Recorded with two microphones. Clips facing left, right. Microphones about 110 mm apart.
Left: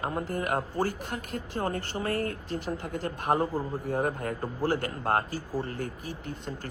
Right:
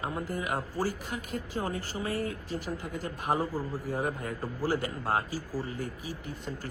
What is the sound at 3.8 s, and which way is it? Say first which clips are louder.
A man's voice: left 5 dB; 50° left (ahead or behind).